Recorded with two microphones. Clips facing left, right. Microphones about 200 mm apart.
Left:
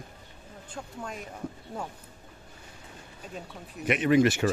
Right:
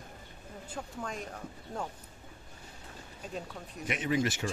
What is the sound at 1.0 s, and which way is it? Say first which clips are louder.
Speech: even; 5° left (ahead or behind).